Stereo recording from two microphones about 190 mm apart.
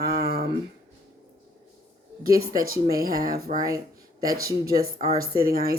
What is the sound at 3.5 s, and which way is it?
Speech, 35° right (ahead or behind).